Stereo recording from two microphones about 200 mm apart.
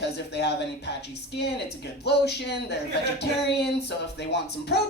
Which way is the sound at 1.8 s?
55° left (ahead or behind).